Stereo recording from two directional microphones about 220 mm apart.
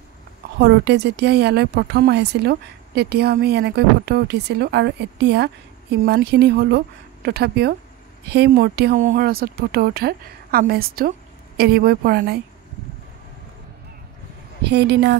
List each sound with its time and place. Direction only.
0.6 s a woman's voice: 50° right (ahead or behind)
14.6 s a woman's voice: 50° right (ahead or behind)